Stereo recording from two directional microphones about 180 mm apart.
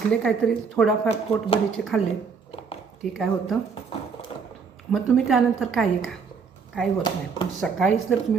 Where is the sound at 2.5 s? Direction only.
30° left (ahead or behind).